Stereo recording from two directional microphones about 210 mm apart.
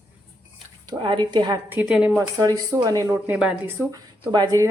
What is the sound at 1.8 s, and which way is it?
Speech, 5° right (ahead or behind).